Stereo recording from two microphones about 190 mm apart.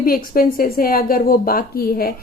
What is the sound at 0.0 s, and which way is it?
A woman's voice, 50° left (ahead or behind).